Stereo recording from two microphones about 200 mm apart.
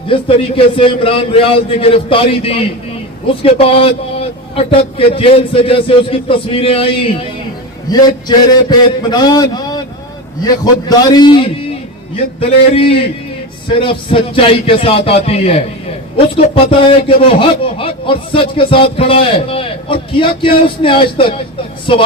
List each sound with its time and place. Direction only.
0.1 s a man's voice: 25° left (ahead or behind)